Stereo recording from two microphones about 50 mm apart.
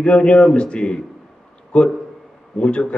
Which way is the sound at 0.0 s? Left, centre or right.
Left.